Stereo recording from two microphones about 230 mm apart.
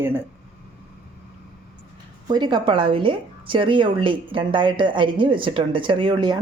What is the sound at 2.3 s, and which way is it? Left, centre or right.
A woman's voice, centre.